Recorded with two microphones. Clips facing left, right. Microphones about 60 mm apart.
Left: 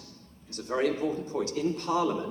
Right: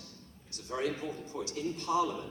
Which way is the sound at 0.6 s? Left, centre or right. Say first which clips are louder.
Left 7 dB; left.